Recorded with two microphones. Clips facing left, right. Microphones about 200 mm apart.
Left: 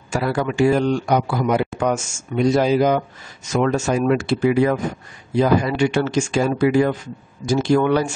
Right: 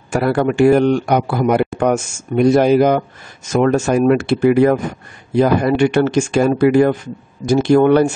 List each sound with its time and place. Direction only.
0.1 s speech: 60° right (ahead or behind)